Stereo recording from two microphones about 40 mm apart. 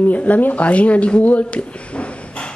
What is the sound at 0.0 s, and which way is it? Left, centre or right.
Speech, left.